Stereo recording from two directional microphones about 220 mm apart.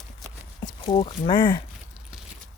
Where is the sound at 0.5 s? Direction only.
20° left (ahead or behind).